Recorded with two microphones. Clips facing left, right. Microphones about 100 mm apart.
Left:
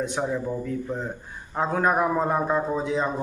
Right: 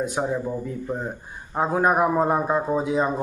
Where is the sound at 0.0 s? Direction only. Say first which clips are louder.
Right 2 dB; 10° right (ahead or behind).